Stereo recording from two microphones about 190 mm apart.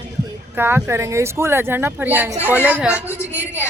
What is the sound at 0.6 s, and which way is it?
Speech, 10° right (ahead or behind).